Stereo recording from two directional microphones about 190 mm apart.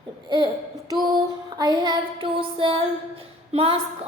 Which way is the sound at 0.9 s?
20° right (ahead or behind).